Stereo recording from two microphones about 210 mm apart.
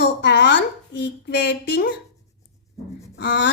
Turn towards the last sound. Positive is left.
turn(degrees=55)  # may be behind; listen again after turning